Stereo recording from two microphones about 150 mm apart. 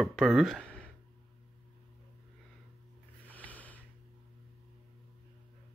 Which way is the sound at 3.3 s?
10° left (ahead or behind).